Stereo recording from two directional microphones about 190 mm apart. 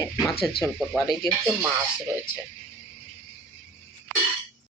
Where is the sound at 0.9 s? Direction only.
Centre (ahead or behind).